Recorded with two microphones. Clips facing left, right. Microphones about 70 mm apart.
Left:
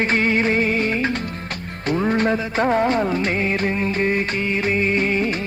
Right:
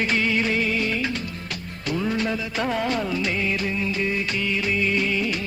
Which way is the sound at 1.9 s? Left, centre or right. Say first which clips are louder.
Left 6 dB; left.